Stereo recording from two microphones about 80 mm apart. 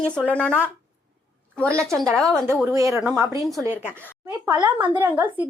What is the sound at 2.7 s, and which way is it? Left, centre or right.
Speech, right.